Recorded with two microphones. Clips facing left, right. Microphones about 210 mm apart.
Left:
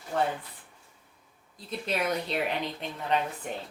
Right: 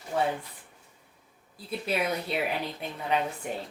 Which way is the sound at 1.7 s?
5° right (ahead or behind).